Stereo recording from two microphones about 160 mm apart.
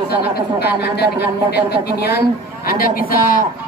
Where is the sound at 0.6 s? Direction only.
90° left.